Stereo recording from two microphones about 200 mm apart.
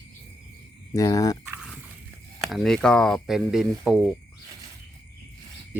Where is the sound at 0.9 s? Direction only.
15° left (ahead or behind).